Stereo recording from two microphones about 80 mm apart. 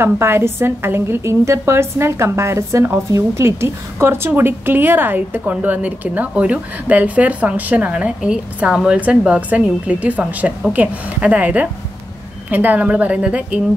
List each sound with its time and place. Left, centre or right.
0.0 s a woman's voice: right